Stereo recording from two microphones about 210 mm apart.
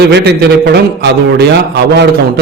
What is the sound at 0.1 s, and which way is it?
A man's voice, 55° right (ahead or behind).